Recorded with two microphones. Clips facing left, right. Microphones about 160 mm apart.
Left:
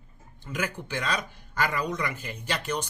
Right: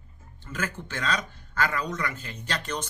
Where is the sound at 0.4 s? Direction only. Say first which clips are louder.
Left 1 dB; 15° left (ahead or behind).